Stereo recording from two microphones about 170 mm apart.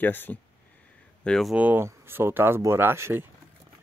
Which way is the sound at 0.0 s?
10° left (ahead or behind).